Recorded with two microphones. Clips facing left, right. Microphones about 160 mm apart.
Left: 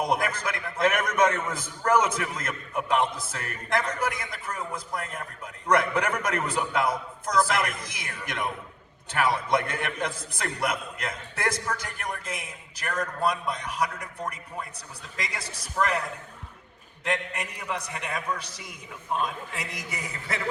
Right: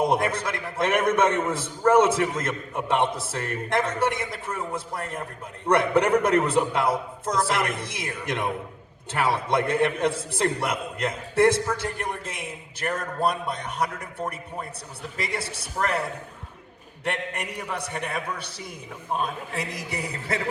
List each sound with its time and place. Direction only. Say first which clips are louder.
0.0 s a man's voice: right 4 dB; 30° right (ahead or behind)
17.1 s a man's voice: right 1 dB; 30° right (ahead or behind)